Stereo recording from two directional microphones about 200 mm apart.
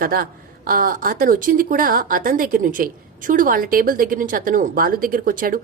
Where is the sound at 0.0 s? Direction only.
45° right (ahead or behind).